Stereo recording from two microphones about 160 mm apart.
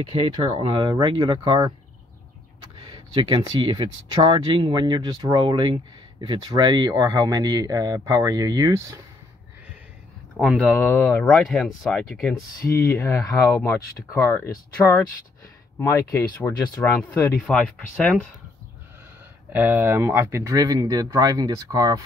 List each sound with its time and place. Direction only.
0.1 s speech: 35° right (ahead or behind)
2.9 s speech: 35° right (ahead or behind)
10.3 s speech: 5° right (ahead or behind)
10.6 s speech: 15° left (ahead or behind)
11.2 s speech: centre (ahead or behind)
12.7 s speech: 15° left (ahead or behind)
19.5 s speech: 15° right (ahead or behind)